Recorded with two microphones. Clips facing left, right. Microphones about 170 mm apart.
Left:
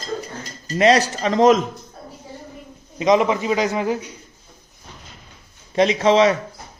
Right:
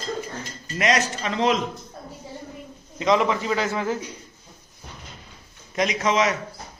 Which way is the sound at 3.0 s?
20° left (ahead or behind).